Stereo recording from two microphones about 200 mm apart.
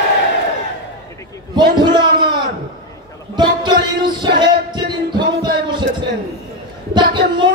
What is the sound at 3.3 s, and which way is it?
Music, 20° right (ahead or behind).